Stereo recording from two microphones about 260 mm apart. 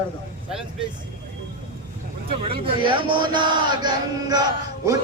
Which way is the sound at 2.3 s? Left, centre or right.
Right.